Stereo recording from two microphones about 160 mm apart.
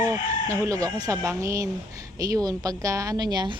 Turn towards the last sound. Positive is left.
turn(degrees=-25)  # may be behind; listen again after turning